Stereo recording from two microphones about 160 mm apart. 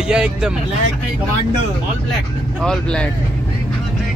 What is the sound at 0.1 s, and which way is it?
Speech, 5° right (ahead or behind).